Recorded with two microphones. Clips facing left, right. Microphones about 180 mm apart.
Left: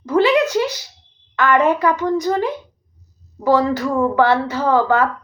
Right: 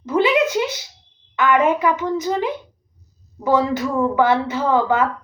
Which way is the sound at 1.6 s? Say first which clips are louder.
Left 1 dB; 20° right (ahead or behind).